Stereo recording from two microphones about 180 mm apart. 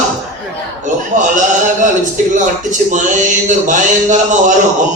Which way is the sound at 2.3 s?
45° right (ahead or behind).